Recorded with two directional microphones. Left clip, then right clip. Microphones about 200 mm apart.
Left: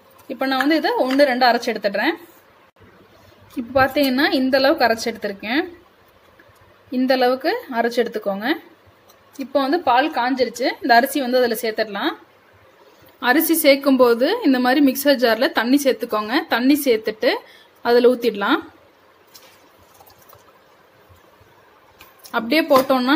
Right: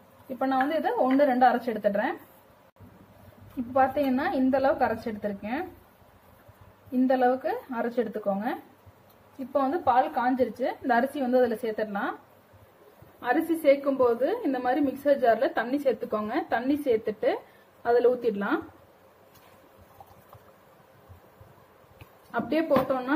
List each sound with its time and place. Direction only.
0.4 s a woman's voice: 55° left (ahead or behind)
3.7 s a woman's voice: 50° left (ahead or behind)
7.1 s a woman's voice: 45° left (ahead or behind)
13.2 s a woman's voice: 60° left (ahead or behind)
22.3 s a woman's voice: 50° left (ahead or behind)